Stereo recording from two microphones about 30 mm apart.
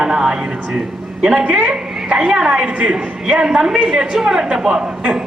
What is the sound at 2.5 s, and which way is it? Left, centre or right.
Speech, right.